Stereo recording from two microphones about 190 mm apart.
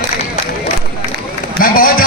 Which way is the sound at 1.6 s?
50° left (ahead or behind).